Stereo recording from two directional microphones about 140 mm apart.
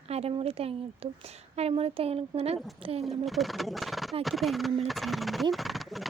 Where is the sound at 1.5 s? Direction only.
45° right (ahead or behind).